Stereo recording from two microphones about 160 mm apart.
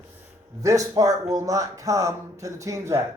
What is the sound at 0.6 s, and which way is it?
A man's voice, 20° right (ahead or behind).